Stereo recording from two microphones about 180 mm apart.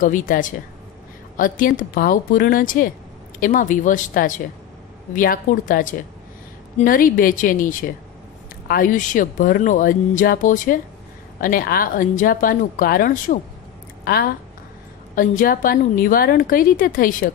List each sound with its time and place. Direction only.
0.0 s speech: 45° left (ahead or behind)